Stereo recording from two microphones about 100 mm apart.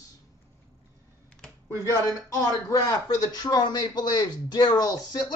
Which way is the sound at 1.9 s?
35° left (ahead or behind).